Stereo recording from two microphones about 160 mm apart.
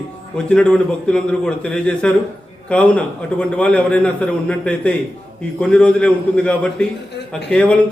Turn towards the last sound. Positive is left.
turn(degrees=10)  # may be behind; listen again after turning